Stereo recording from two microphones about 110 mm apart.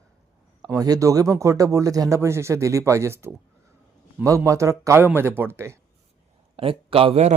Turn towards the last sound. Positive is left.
turn(degrees=-65)  # may be behind; listen again after turning